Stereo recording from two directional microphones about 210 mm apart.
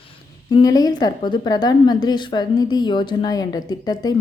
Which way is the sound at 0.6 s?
20° left (ahead or behind).